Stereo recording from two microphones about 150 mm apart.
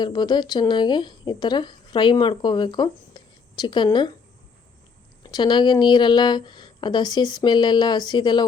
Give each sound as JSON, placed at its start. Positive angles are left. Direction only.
{"t": 0.0, "sound": "a woman's voice", "side_deg": 30}
{"t": 5.2, "sound": "a woman's voice", "side_deg": 30}